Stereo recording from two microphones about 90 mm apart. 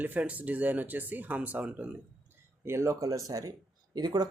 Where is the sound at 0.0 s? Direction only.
20° right (ahead or behind).